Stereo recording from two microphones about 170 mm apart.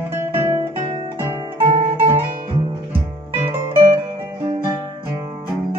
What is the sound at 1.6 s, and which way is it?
Zither, 35° right (ahead or behind).